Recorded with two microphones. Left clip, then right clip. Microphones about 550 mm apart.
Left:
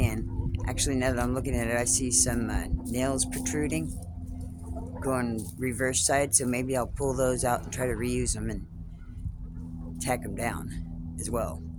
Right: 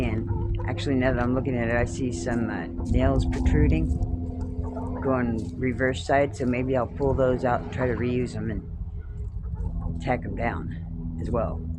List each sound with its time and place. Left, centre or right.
0.7 s speech: left
5.0 s speech: left
10.0 s speech: left